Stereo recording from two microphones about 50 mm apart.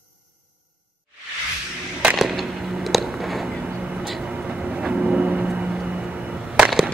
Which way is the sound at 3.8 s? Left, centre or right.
Right.